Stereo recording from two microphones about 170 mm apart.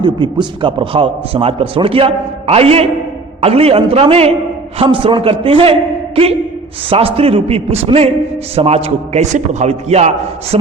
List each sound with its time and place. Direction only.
0.0 s a man's voice: 25° right (ahead or behind)
6.9 s a man's voice: 35° right (ahead or behind)